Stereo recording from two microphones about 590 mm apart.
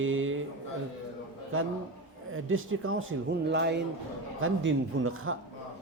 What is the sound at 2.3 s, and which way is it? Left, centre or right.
Speech, right.